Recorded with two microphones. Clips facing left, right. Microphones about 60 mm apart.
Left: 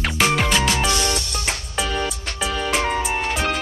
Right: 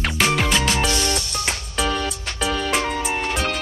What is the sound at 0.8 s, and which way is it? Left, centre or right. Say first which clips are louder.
Music: left 1 dB; left.